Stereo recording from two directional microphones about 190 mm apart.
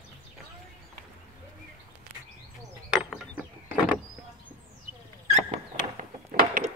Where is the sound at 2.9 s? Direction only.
Centre (ahead or behind).